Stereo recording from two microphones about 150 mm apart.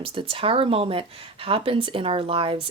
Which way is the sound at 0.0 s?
35° right (ahead or behind).